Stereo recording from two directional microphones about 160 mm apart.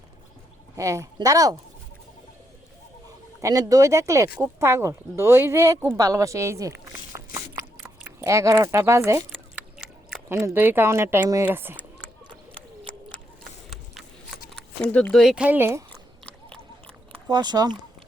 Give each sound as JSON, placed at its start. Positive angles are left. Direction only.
{"t": 0.8, "sound": "speech", "side_deg": -20}
{"t": 3.1, "sound": "speech", "side_deg": -20}
{"t": 6.0, "sound": "biting", "side_deg": -20}
{"t": 8.2, "sound": "speech", "side_deg": -20}
{"t": 11.8, "sound": "a sound", "side_deg": 10}
{"t": 14.5, "sound": "speech", "side_deg": 5}
{"t": 15.9, "sound": "biting", "side_deg": 5}
{"t": 17.2, "sound": "speech", "side_deg": -25}